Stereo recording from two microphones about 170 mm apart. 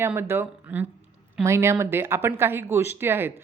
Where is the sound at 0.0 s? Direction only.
15° right (ahead or behind).